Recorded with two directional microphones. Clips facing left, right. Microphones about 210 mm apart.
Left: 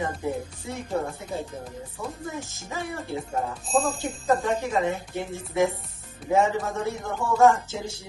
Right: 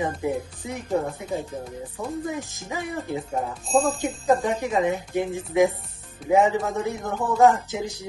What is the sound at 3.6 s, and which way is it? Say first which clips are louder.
Jingle bell: right 4 dB; centre (ahead or behind).